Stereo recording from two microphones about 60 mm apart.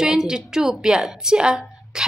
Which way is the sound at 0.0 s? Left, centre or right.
Centre.